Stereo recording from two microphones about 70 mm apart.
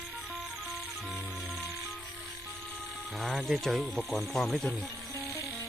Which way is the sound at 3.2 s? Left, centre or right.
Centre.